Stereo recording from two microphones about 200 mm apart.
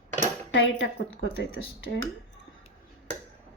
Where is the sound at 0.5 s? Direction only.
80° left.